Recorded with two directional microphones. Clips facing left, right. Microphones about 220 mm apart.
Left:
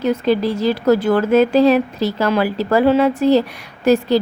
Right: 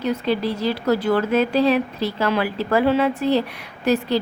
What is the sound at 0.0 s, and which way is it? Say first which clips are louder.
A woman's voice: left 5 dB; 45° left (ahead or behind).